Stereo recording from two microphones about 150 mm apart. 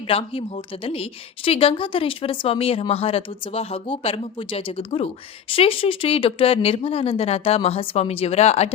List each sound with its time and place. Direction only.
0.1 s a woman's voice: 40° left (ahead or behind)